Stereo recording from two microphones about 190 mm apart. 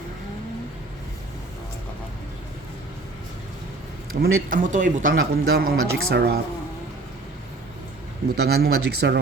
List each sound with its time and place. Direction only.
4.1 s speech: 50° right (ahead or behind)
8.4 s speech: 55° right (ahead or behind)